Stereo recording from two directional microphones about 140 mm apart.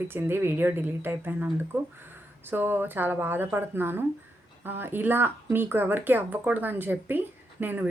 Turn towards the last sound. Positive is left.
turn(degrees=-15)  # may be behind; listen again after turning